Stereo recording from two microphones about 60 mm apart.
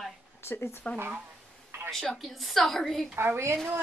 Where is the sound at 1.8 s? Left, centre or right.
Centre.